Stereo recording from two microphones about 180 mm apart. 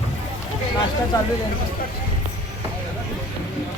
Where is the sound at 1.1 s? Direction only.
20° left (ahead or behind).